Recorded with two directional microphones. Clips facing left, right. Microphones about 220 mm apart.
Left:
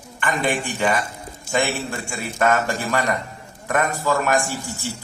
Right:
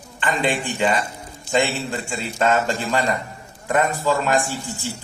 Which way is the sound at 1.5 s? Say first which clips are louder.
Right 2 dB; 20° right (ahead or behind).